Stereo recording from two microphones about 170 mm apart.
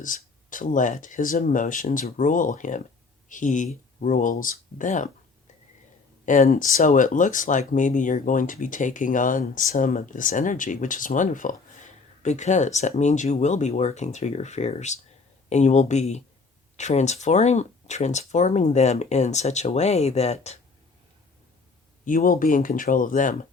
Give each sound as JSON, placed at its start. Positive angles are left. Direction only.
{"t": 0.0, "sound": "speech", "side_deg": 50}
{"t": 6.2, "sound": "speech", "side_deg": 50}
{"t": 22.0, "sound": "speech", "side_deg": 50}